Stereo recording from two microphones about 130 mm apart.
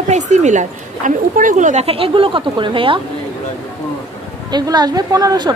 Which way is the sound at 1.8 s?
45° right (ahead or behind).